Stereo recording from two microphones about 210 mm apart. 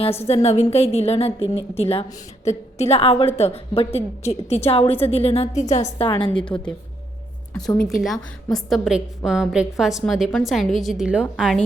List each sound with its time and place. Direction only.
0.0 s a woman's voice: 30° left (ahead or behind)
7.8 s a woman's voice: centre (ahead or behind)